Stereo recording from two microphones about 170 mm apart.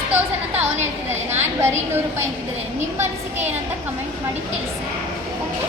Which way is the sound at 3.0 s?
15° right (ahead or behind).